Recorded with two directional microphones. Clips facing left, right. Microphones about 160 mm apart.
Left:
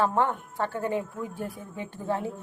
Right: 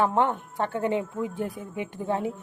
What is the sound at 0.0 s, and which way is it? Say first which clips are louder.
A woman's voice: right 2 dB; 20° right (ahead or behind).